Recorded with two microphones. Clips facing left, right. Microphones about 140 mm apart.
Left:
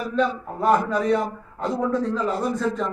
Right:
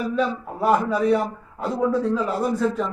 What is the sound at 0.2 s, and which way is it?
A man's voice, 5° right (ahead or behind).